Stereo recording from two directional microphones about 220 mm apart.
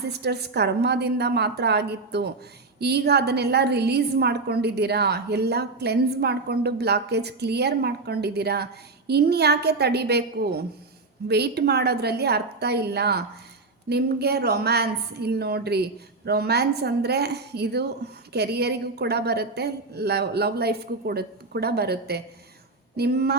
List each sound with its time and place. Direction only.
0.1 s a woman's voice: 50° right (ahead or behind)